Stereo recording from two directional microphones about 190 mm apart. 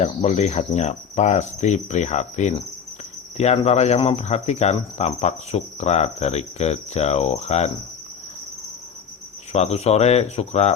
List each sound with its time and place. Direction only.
0.0 s cricket: 35° left (ahead or behind)
9.5 s cricket: 35° left (ahead or behind)